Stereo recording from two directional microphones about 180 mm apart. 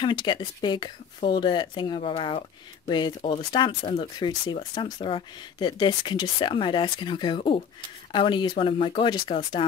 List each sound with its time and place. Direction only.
0.0 s speech: 25° left (ahead or behind)